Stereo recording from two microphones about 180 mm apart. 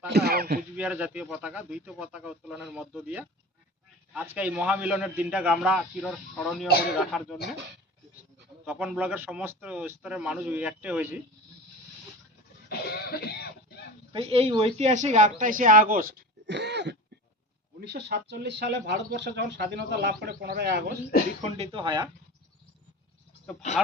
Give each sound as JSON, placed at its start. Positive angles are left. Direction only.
{"t": 0.1, "sound": "throat clearing", "side_deg": -65}
{"t": 0.8, "sound": "a man's voice", "side_deg": -10}
{"t": 4.3, "sound": "a man's voice", "side_deg": -10}
{"t": 8.6, "sound": "speech", "side_deg": -5}
{"t": 12.6, "sound": "cough", "side_deg": 60}
{"t": 14.1, "sound": "speech", "side_deg": -35}
{"t": 21.4, "sound": "speech", "side_deg": -35}